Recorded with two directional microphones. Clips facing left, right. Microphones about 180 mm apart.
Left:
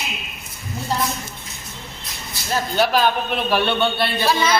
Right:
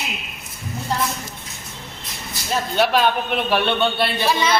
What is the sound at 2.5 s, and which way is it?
A man's voice, centre (ahead or behind).